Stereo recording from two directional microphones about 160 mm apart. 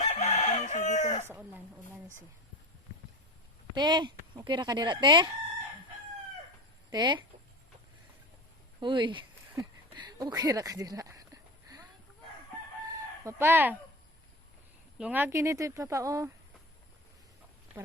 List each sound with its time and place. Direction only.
0.0 s chicken: 50° left (ahead or behind)
1.3 s a sound: 10° right (ahead or behind)
3.8 s speech: 30° right (ahead or behind)
6.9 s speech: 25° right (ahead or behind)
8.8 s speech: 30° right (ahead or behind)
13.2 s speech: 15° right (ahead or behind)
14.9 s speech: 10° right (ahead or behind)